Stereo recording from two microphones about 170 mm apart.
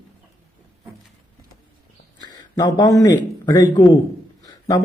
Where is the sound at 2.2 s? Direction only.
20° left (ahead or behind).